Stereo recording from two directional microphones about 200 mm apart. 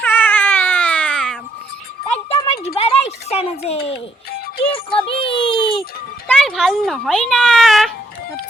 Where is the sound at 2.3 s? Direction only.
30° left (ahead or behind).